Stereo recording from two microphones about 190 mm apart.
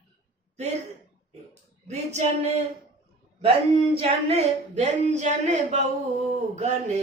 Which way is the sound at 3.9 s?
35° right (ahead or behind).